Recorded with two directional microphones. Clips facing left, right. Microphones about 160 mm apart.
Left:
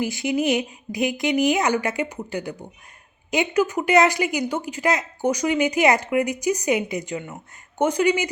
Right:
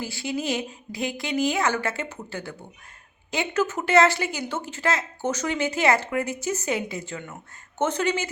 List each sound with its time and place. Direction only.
0.0 s speech: 20° left (ahead or behind)